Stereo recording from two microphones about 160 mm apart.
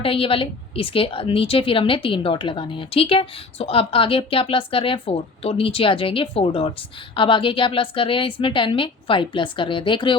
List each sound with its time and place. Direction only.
0.0 s a woman's voice: 35° left (ahead or behind)